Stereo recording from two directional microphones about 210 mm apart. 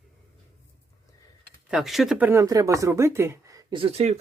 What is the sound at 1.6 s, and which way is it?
Speech, centre (ahead or behind).